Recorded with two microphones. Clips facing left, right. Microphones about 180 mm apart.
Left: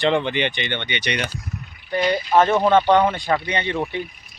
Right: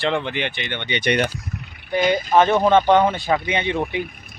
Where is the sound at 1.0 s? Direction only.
50° right (ahead or behind).